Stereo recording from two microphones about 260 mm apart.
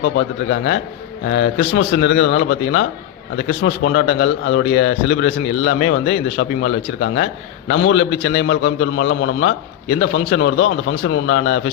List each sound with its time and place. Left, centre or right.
0.0 s speech: left